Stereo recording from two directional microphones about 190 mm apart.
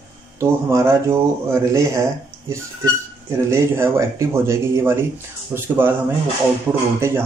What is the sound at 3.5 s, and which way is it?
A man's voice, 15° right (ahead or behind).